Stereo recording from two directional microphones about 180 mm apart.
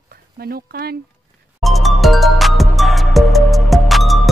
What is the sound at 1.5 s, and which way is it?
Music, centre (ahead or behind).